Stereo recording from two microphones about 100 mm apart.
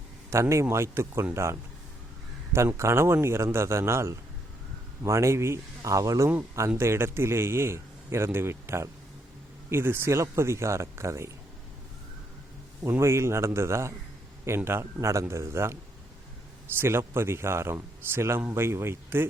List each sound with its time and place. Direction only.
0.3 s speech: 30° right (ahead or behind)
13.0 s speech: 25° right (ahead or behind)